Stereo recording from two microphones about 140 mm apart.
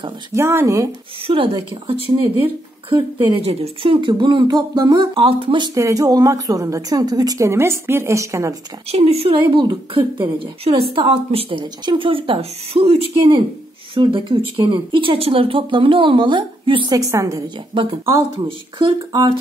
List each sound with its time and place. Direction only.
0.3 s a woman's voice: 20° right (ahead or behind)
1.2 s a woman's voice: 40° right (ahead or behind)
5.8 s a woman's voice: 25° right (ahead or behind)
8.9 s a woman's voice: 45° right (ahead or behind)
16.9 s a woman's voice: 20° right (ahead or behind)
18.8 s a woman's voice: 35° right (ahead or behind)